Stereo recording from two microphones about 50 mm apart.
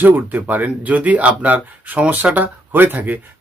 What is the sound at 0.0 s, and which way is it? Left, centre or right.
Speech, right.